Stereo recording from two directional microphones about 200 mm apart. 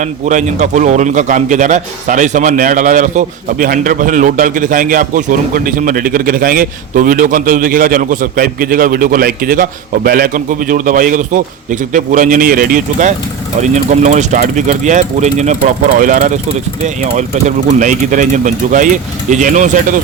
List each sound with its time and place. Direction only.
0.0 s a man's voice: 40° right (ahead or behind)